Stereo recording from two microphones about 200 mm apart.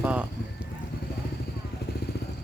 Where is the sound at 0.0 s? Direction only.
5° right (ahead or behind).